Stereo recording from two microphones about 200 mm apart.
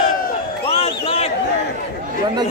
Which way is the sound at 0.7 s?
30° left (ahead or behind).